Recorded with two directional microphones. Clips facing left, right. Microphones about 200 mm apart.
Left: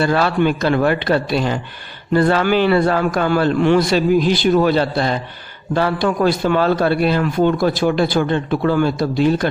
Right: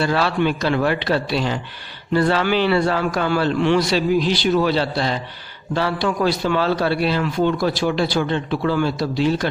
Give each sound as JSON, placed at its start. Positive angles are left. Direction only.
{"t": 0.0, "sound": "a man's voice", "side_deg": 50}